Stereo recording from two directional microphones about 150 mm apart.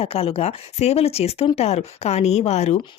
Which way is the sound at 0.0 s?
40° left (ahead or behind).